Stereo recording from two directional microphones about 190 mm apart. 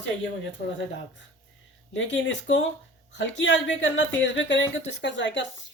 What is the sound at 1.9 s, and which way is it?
Speech, 75° left (ahead or behind).